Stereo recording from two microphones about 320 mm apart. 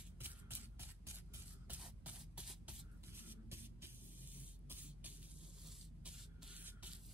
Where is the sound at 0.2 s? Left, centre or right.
Centre.